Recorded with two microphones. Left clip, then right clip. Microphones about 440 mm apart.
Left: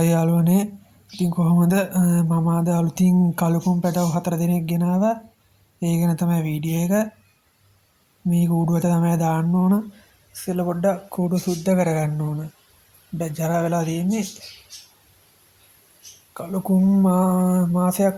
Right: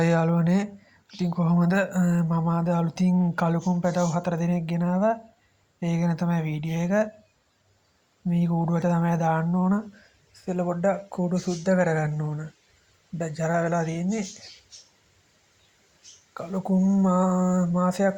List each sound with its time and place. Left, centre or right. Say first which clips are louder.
0.0 s speech: left 2 dB; left
8.3 s speech: left 4 dB; left
16.3 s speech: left 4 dB; left